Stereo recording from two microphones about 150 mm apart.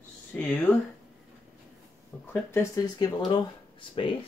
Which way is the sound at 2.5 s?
25° left (ahead or behind).